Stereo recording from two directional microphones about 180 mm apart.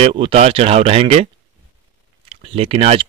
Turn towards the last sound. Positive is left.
turn(degrees=-35)  # may be behind; listen again after turning